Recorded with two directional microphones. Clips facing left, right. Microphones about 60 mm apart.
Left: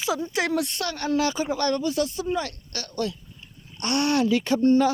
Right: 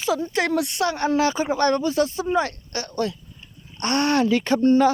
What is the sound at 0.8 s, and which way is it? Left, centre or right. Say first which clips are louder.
Speech: right 4 dB; right.